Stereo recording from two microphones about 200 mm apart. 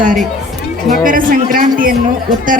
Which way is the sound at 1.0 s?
45° right (ahead or behind).